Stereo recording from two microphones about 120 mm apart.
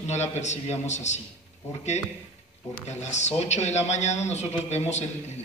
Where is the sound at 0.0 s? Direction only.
70° left (ahead or behind).